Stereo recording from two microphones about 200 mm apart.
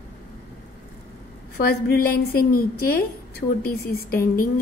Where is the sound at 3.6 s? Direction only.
50° left (ahead or behind).